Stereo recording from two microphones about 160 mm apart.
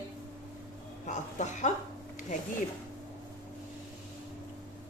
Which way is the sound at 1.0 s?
50° left (ahead or behind).